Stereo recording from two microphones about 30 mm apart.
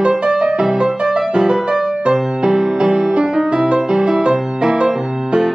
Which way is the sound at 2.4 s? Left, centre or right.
Right.